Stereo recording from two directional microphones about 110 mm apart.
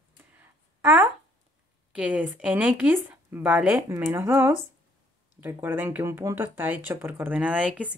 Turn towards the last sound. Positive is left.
turn(degrees=-10)  # may be behind; listen again after turning